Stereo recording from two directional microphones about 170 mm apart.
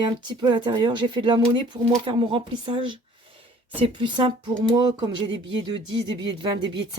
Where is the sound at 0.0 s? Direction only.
25° right (ahead or behind).